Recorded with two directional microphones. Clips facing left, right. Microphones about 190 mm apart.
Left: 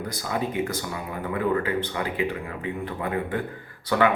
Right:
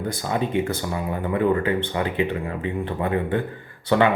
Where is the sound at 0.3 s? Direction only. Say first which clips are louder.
Right 3 dB; 25° right (ahead or behind).